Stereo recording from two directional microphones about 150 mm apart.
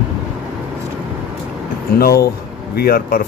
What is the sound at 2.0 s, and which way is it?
Speech, 85° left.